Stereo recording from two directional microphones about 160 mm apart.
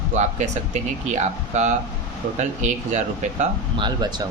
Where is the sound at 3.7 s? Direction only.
30° right (ahead or behind).